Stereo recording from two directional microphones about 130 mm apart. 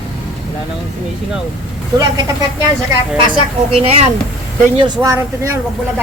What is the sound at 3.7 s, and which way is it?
Speech, 55° right (ahead or behind).